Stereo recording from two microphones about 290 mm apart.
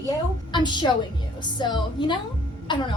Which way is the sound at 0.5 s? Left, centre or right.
Centre.